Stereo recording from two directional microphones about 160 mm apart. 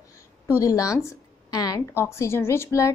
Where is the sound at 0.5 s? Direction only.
20° left (ahead or behind).